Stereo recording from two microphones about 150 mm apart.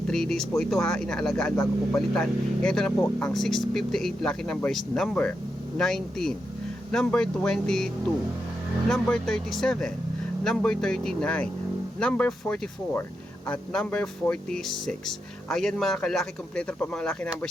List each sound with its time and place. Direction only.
0.1 s speech: 5° left (ahead or behind)
8.9 s speech: 5° left (ahead or behind)